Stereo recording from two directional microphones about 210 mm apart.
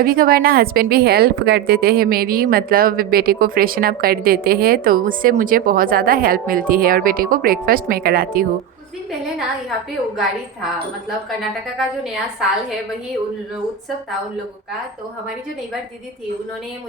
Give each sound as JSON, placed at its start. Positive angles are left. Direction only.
{"t": 0.0, "sound": "a woman's voice", "side_deg": -45}